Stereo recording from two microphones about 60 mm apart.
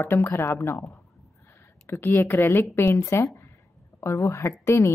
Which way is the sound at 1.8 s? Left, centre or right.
Left.